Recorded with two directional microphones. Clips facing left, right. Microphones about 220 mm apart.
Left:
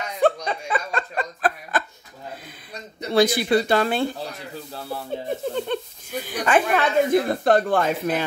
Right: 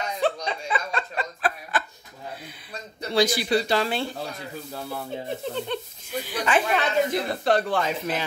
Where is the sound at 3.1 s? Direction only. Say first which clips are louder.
Left 4 dB; 55° left (ahead or behind).